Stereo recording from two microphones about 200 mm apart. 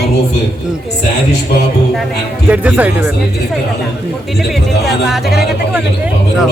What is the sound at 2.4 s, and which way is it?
Speech, 5° right (ahead or behind).